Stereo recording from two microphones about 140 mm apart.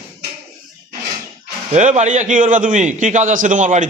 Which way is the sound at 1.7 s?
55° right (ahead or behind).